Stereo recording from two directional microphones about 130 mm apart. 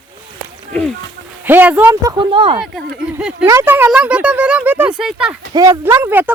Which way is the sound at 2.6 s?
5° right (ahead or behind).